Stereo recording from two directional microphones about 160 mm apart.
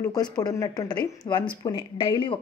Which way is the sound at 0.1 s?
25° left (ahead or behind).